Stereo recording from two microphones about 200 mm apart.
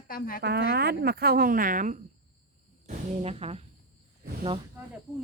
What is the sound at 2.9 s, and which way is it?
Speech, 30° right (ahead or behind).